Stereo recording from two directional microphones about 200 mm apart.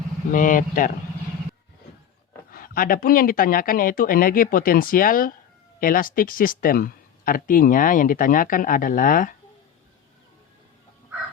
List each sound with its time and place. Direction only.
0.3 s speech: 40° left (ahead or behind)
2.5 s speech: 45° left (ahead or behind)